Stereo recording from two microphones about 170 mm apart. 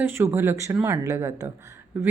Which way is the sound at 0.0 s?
15° right (ahead or behind).